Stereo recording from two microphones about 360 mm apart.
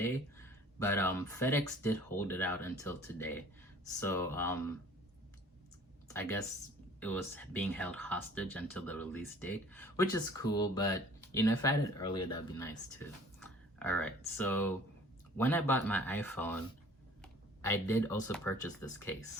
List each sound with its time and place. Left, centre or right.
0.0 s speech: centre
6.1 s speech: centre